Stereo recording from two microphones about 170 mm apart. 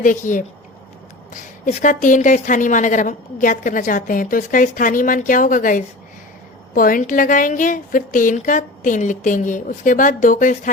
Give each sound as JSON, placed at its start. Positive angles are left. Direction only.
{"t": 0.0, "sound": "a woman's voice", "side_deg": 50}